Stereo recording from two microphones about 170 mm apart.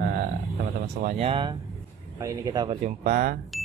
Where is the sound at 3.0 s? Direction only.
55° right (ahead or behind).